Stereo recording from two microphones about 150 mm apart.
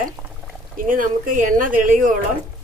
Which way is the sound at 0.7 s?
65° right (ahead or behind).